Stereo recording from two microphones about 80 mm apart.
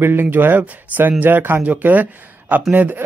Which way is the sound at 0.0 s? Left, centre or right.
Right.